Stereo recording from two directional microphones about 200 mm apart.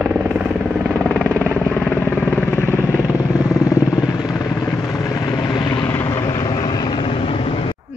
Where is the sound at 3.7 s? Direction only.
15° left (ahead or behind).